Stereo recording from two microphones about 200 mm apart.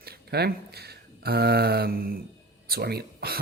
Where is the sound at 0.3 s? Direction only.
55° right (ahead or behind).